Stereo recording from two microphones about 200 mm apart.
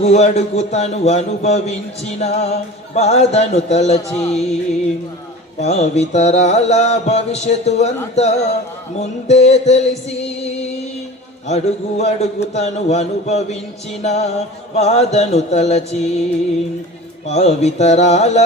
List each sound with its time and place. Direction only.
0.0 s mantra: 35° left (ahead or behind)
5.5 s mantra: 35° left (ahead or behind)
17.2 s mantra: 35° left (ahead or behind)